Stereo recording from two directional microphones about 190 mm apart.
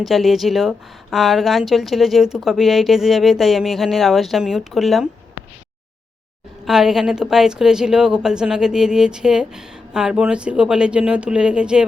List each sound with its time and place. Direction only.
0.0 s a woman's voice: centre (ahead or behind)
6.7 s a woman's voice: centre (ahead or behind)